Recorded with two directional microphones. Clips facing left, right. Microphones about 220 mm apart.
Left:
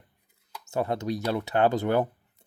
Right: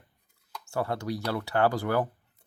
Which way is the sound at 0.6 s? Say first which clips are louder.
Left 3 dB; 20° left (ahead or behind).